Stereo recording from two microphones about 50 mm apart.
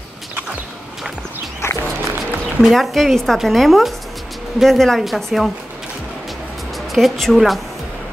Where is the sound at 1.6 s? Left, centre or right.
Left.